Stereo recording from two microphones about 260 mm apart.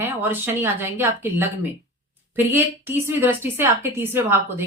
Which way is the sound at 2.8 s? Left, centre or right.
Centre.